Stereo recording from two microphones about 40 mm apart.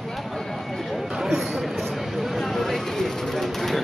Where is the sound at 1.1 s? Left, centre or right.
Centre.